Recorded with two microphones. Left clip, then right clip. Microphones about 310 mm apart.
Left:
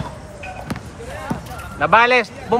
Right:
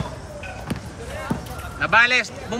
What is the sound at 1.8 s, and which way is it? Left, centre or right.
Speech, centre.